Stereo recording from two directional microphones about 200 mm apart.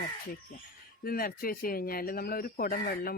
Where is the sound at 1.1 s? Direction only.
45° left (ahead or behind).